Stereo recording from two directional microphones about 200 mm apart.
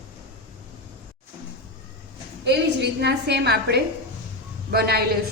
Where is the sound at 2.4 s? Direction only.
55° right (ahead or behind).